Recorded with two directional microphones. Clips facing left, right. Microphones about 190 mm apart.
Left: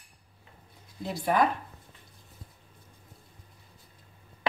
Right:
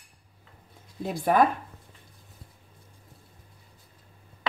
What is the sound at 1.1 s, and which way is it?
Speech, 50° right (ahead or behind).